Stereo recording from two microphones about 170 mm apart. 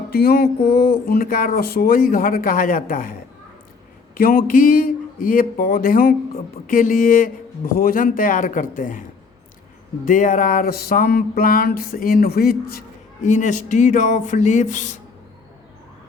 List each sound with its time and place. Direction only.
0.1 s speech: 65° left (ahead or behind)
10.1 s speech: 50° left (ahead or behind)
13.2 s speech: 45° left (ahead or behind)